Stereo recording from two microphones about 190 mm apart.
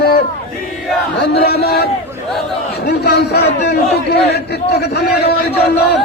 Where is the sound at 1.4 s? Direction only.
55° left (ahead or behind).